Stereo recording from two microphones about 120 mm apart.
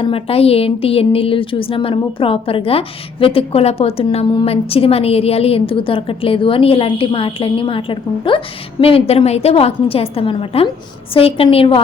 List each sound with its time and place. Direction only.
0.0 s a woman's voice: 50° left (ahead or behind)